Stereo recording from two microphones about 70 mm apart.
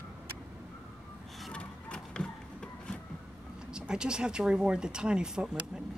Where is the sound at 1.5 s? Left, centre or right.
Centre.